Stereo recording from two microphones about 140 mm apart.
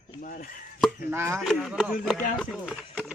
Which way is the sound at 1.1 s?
20° right (ahead or behind).